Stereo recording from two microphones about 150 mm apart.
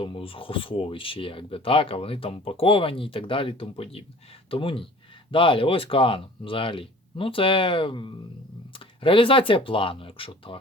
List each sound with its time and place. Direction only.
0.0 s speech: 35° left (ahead or behind)